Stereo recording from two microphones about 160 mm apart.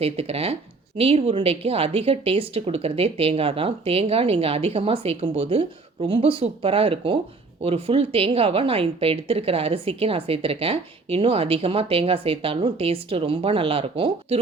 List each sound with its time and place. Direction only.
0.0 s speech: 40° right (ahead or behind)